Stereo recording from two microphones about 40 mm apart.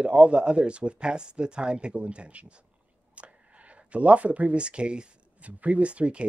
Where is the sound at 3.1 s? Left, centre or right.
Right.